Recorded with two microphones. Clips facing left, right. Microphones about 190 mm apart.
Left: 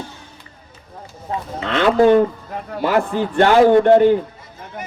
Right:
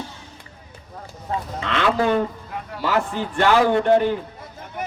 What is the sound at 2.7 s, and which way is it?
Speech, 55° left (ahead or behind).